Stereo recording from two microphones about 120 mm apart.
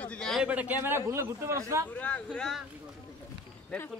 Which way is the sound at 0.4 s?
10° right (ahead or behind).